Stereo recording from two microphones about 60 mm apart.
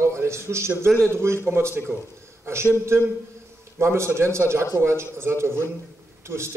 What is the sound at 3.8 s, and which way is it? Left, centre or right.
A man's voice, right.